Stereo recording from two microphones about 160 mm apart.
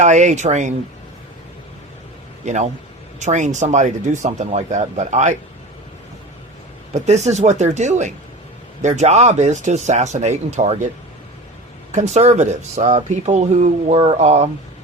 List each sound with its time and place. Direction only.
0.0 s speech: 50° right (ahead or behind)
2.4 s a man's voice: 50° right (ahead or behind)
6.9 s speech: 45° right (ahead or behind)
11.9 s speech: 50° right (ahead or behind)